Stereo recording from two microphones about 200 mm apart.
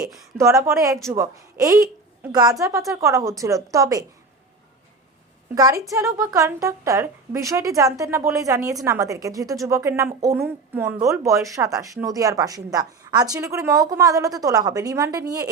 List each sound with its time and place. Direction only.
0.3 s a woman's voice: 15° right (ahead or behind)
5.5 s a woman's voice: 20° right (ahead or behind)